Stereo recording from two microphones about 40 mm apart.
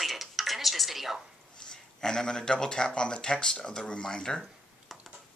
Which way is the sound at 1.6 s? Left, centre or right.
Centre.